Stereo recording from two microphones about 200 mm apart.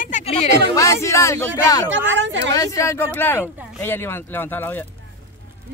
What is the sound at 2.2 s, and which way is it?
Speech, 65° right (ahead or behind).